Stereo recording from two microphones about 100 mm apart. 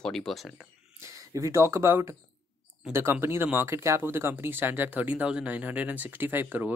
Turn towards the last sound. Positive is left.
turn(degrees=-20)  # may be behind; listen again after turning